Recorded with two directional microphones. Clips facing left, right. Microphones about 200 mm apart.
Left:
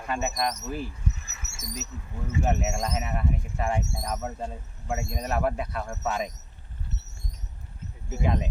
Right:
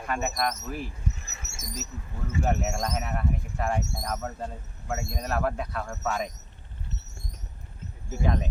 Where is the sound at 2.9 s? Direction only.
20° left (ahead or behind).